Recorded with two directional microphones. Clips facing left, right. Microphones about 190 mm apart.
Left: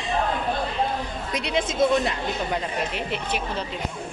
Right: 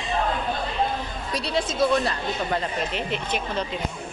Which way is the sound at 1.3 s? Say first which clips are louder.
Left 1 dB; 20° left (ahead or behind).